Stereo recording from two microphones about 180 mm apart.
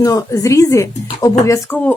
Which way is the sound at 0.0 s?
20° left (ahead or behind).